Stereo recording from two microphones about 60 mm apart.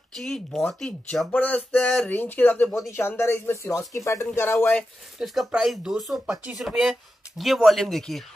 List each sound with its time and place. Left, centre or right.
0.1 s speech: centre
1.3 s speech: left
2.9 s speech: left
4.4 s speech: left
5.2 s speech: centre